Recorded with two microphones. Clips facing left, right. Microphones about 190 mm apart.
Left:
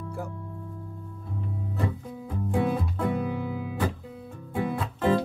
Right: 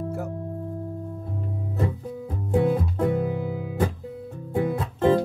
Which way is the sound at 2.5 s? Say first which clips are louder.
Right 5 dB; 45° right (ahead or behind).